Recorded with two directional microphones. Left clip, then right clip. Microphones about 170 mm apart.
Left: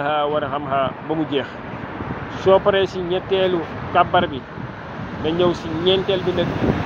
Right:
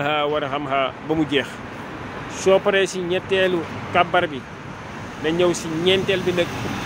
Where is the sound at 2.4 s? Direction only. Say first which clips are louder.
Left 2 dB; 20° right (ahead or behind).